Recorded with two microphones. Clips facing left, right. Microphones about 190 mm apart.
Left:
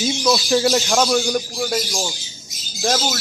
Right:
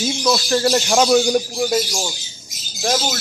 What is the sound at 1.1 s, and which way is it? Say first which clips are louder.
Speech: right 4 dB; 20° right (ahead or behind).